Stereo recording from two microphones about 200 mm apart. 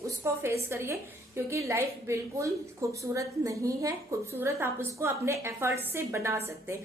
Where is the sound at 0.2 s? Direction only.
15° right (ahead or behind).